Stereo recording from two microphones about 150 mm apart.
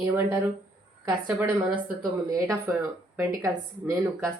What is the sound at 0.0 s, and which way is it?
Speech, 15° right (ahead or behind).